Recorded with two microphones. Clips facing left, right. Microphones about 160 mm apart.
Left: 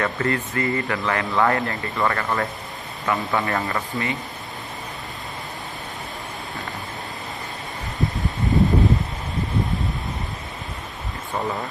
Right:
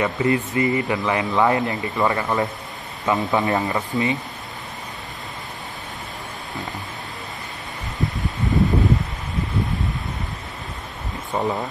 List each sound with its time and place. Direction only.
0.0 s speech: 15° right (ahead or behind)
11.3 s speech: 10° right (ahead or behind)